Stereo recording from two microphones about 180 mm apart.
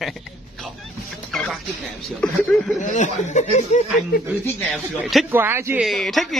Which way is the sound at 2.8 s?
45° left (ahead or behind).